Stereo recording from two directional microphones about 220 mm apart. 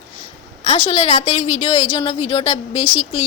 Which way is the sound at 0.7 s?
30° left (ahead or behind).